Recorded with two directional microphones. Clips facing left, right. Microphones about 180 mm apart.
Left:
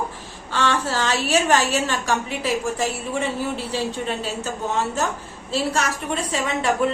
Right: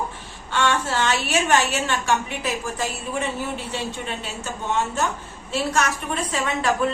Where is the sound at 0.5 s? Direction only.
35° left (ahead or behind).